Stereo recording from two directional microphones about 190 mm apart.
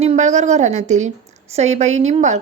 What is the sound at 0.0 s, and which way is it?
A woman's voice, 35° right (ahead or behind).